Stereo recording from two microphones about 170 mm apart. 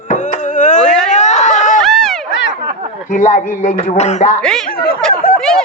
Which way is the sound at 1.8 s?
Centre (ahead or behind).